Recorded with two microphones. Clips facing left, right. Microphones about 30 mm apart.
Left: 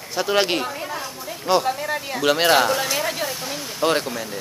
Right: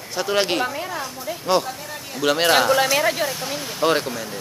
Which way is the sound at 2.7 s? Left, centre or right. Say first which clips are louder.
Right 5 dB; centre.